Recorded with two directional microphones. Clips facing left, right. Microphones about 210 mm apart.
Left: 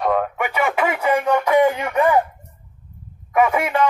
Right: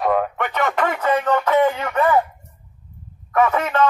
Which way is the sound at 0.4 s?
10° left (ahead or behind).